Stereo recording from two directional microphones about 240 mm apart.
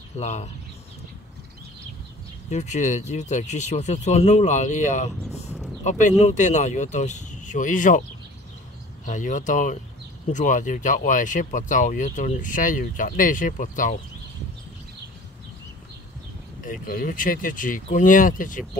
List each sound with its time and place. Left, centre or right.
0.2 s speech: left
2.5 s speech: left
9.0 s speech: left
16.6 s speech: left